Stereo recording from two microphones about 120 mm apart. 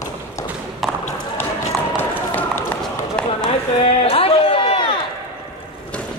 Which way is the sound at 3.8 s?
55° left (ahead or behind).